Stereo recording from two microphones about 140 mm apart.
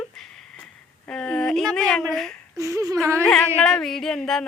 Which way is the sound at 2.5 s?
20° right (ahead or behind).